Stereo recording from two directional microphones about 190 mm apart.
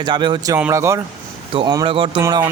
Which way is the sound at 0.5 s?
10° right (ahead or behind).